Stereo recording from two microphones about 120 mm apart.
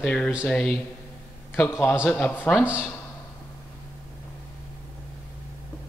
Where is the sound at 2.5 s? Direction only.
10° right (ahead or behind).